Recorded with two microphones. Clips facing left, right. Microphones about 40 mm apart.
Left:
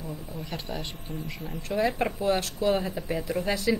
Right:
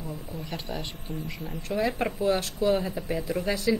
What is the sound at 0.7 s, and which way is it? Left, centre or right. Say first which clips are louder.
A woman's voice: right 1 dB; centre.